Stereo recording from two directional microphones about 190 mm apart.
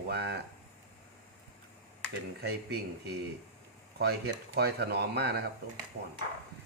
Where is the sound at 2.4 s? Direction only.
60° right (ahead or behind).